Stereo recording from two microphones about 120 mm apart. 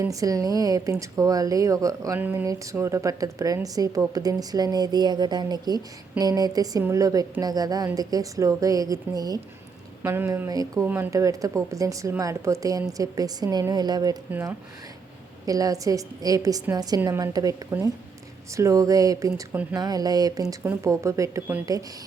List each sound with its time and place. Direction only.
0.0 s speech: 30° right (ahead or behind)
2.1 s speech: 15° right (ahead or behind)
10.0 s speech: 20° right (ahead or behind)
10.5 s speech: 30° right (ahead or behind)
10.8 s speech: 15° right (ahead or behind)
11.1 s speech: 25° right (ahead or behind)
15.4 s speech: 30° right (ahead or behind)